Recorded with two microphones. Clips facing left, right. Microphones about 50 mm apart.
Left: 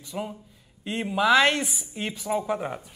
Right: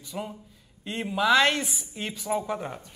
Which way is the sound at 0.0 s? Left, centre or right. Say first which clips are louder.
Left 2 dB; centre.